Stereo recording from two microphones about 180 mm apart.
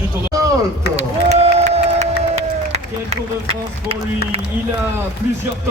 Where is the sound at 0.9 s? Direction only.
35° right (ahead or behind).